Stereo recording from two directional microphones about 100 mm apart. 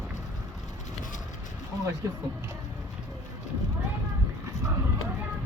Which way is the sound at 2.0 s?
30° right (ahead or behind).